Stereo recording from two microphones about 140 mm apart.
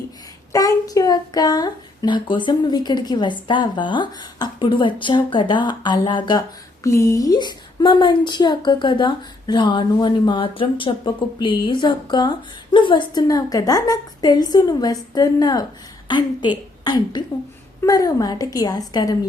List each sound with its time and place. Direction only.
0.5 s a woman's voice: 25° left (ahead or behind)
6.8 s a woman's voice: 20° left (ahead or behind)